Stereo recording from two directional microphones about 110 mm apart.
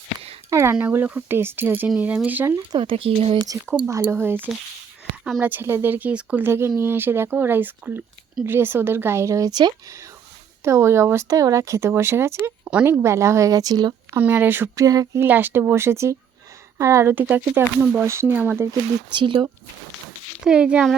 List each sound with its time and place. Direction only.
0.5 s speech: 20° right (ahead or behind)
2.6 s speech: 50° right (ahead or behind)
3.8 s speech: 25° right (ahead or behind); by 9.7 s 40° right (ahead or behind)
10.6 s speech: 25° right (ahead or behind)
14.1 s speech: 15° right (ahead or behind)
14.8 s speech: 30° right (ahead or behind)
15.2 s speech: 20° right (ahead or behind)
19.1 s speech: 50° right (ahead or behind)
20.4 s speech: 10° right (ahead or behind)